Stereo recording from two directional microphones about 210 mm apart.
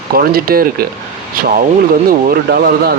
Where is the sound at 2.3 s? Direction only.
45° right (ahead or behind).